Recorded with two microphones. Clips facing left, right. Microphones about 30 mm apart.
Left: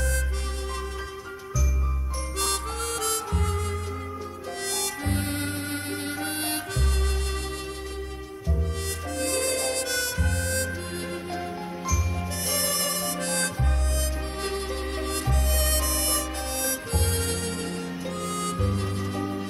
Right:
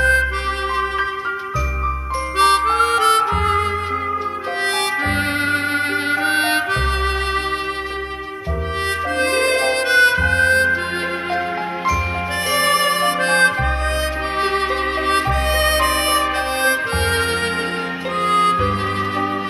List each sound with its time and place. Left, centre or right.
0.0 s music: right
2.3 s harmonica: right
5.0 s music: right
9.2 s music: right
12.4 s music: right
15.0 s music: right